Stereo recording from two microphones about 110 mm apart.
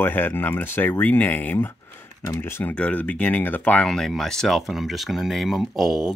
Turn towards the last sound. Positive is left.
turn(degrees=-5)  # may be behind; listen again after turning